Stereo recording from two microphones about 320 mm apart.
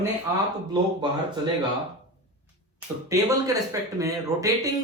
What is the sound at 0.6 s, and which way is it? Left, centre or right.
Speech, centre.